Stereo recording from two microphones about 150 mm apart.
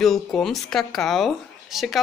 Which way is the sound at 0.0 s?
Centre (ahead or behind).